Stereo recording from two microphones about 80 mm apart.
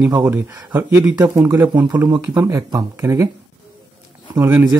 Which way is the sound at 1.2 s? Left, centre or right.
Right.